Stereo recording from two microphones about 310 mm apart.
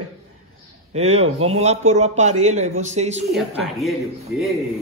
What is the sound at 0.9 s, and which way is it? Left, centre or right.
Speech, centre.